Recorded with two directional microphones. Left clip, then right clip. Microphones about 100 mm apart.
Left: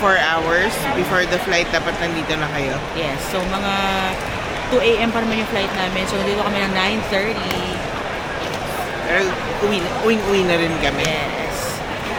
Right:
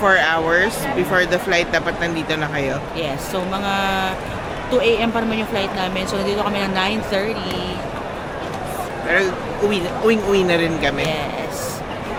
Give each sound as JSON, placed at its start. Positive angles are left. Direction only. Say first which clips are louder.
{"t": 0.0, "sound": "speech", "louder": "right 1 dB", "side_deg": -20}
{"t": 3.7, "sound": "speech", "louder": "right 1 dB", "side_deg": -5}
{"t": 9.7, "sound": "speech", "louder": "right 2 dB", "side_deg": -20}